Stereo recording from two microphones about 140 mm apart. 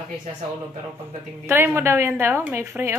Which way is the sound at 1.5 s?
15° right (ahead or behind).